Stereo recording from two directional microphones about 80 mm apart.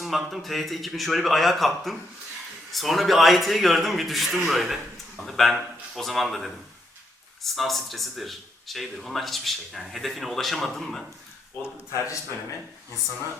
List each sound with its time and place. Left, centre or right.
0.0 s speech: centre
11.9 s a man's voice: left